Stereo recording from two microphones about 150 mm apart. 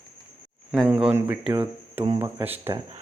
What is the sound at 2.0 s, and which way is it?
Speech, 25° right (ahead or behind).